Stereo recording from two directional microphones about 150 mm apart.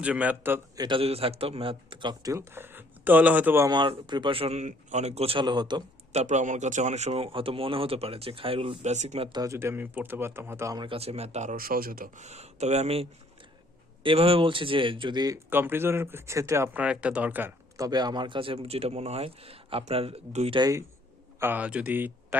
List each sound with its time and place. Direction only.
0.0 s speech: 10° right (ahead or behind)
0.8 s speech: 35° right (ahead or behind); by 3.7 s 15° right (ahead or behind)
3.7 s speech: 30° right (ahead or behind)
6.1 s speech: 50° right (ahead or behind)
9.3 s speech: 20° right (ahead or behind)
10.8 s speech: 40° right (ahead or behind)
11.5 s a man's voice: 75° right (ahead or behind)
12.2 s speech: 45° right (ahead or behind); by 15.4 s 25° right (ahead or behind)
15.4 s speech: 15° right (ahead or behind)
17.8 s speech: 25° right (ahead or behind)
20.6 s a man's voice: 25° right (ahead or behind)